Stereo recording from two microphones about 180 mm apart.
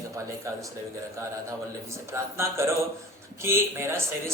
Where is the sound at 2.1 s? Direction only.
15° right (ahead or behind).